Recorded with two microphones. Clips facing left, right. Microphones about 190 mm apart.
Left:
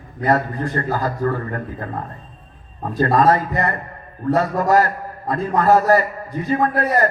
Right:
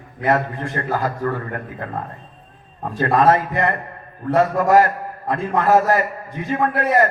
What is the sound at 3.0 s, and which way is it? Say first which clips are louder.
A man's voice: even; 40° left (ahead or behind).